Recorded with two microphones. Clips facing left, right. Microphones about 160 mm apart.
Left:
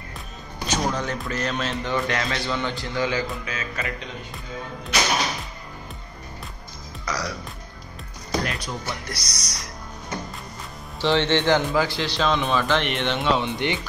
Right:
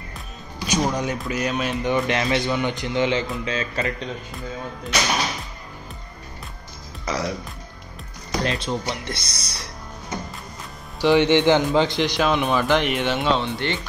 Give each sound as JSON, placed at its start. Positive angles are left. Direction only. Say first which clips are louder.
{"t": 0.7, "sound": "speech", "louder": "right 3 dB", "side_deg": -15}
{"t": 7.1, "sound": "speech", "louder": "right 4 dB", "side_deg": -25}
{"t": 8.5, "sound": "speech", "louder": "right 5 dB", "side_deg": -25}
{"t": 11.0, "sound": "speech", "louder": "right 4 dB", "side_deg": -15}
{"t": 13.4, "sound": "speech", "louder": "even", "side_deg": 15}